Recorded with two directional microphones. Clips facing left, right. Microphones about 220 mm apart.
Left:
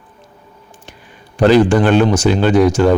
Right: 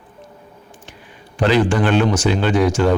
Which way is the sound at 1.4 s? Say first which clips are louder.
Left 6 dB; 40° left (ahead or behind).